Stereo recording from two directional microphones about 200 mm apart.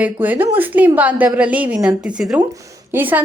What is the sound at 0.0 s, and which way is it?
A woman's voice, 10° right (ahead or behind).